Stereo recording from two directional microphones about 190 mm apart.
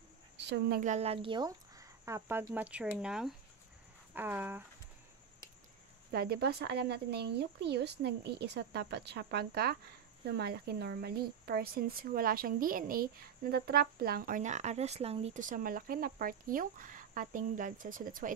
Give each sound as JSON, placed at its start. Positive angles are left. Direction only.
{"t": 0.5, "sound": "speech", "side_deg": -55}
{"t": 0.8, "sound": "speech", "side_deg": -35}
{"t": 6.1, "sound": "speech", "side_deg": -55}